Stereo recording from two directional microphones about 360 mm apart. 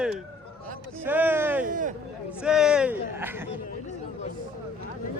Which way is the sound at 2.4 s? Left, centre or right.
Centre.